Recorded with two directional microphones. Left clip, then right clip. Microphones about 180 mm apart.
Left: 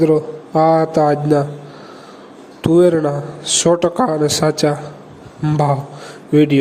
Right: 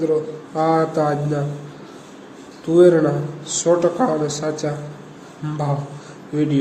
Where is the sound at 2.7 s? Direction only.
50° left (ahead or behind).